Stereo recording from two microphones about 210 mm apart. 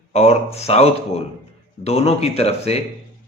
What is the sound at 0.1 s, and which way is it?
A man's voice, 30° left (ahead or behind).